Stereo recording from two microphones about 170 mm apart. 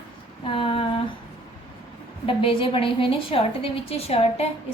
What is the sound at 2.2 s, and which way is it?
A woman's voice, 30° left (ahead or behind).